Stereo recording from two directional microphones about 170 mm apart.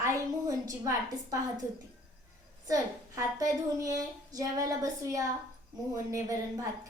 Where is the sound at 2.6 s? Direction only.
20° right (ahead or behind).